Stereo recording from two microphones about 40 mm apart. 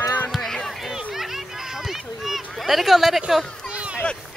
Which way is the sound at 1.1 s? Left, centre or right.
Centre.